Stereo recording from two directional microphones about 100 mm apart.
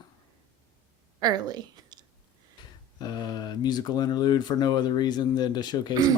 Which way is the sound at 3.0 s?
45° left (ahead or behind).